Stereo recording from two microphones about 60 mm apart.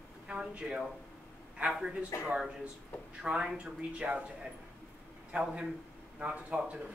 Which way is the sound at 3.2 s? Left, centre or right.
Centre.